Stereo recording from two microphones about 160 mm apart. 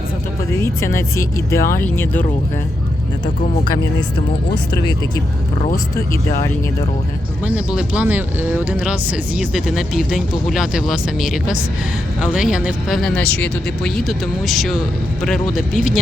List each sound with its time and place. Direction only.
0.5 s speech: 15° left (ahead or behind)
7.4 s speech: 5° right (ahead or behind)